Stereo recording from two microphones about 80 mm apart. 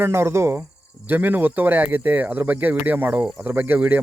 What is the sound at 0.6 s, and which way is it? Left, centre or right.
Speech, right.